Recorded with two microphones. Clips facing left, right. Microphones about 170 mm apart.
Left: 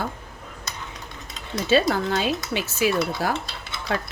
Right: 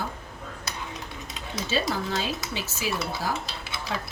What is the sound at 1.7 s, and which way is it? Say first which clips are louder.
Speech: left 7 dB; 60° left (ahead or behind).